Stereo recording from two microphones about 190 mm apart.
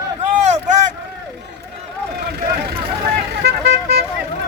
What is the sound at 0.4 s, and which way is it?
Vehicle, 40° right (ahead or behind).